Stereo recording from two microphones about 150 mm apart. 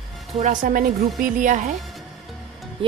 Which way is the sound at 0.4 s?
60° right (ahead or behind).